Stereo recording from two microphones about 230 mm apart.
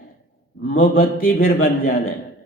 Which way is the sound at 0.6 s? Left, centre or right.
Left.